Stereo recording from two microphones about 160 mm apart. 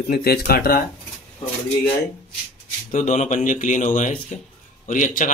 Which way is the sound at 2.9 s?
45° left (ahead or behind).